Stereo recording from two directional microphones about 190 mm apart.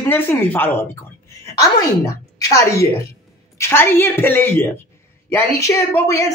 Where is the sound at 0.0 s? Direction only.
10° left (ahead or behind).